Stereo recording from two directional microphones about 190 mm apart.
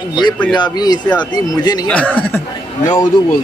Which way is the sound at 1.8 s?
5° left (ahead or behind).